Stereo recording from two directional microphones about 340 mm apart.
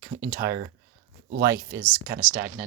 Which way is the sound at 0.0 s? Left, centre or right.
Centre.